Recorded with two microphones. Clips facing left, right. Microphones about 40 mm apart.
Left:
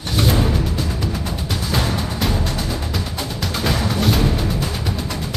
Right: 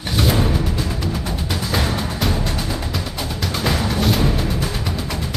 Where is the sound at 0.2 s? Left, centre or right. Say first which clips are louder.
Even; centre.